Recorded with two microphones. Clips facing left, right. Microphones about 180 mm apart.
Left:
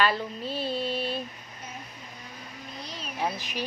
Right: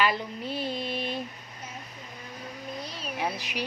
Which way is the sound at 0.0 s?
15° right (ahead or behind).